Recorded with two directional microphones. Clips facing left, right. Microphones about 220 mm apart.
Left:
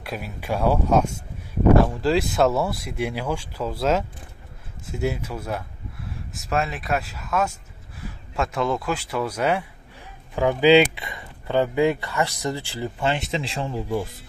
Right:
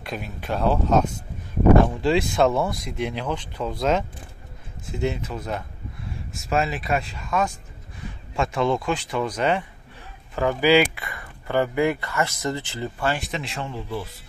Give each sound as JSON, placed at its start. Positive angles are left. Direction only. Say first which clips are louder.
{"t": 0.0, "sound": "speech", "louder": "even", "side_deg": 5}